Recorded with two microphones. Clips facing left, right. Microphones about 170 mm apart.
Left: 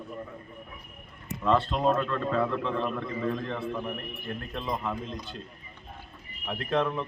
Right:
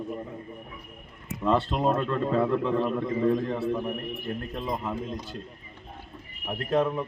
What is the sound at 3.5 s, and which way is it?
Speech, 10° right (ahead or behind).